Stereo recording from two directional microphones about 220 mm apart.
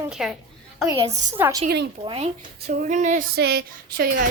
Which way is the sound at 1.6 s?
50° right (ahead or behind).